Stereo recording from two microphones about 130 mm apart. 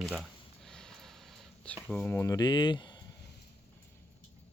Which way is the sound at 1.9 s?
15° left (ahead or behind).